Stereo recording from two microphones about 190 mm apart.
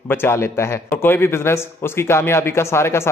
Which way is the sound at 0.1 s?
10° left (ahead or behind).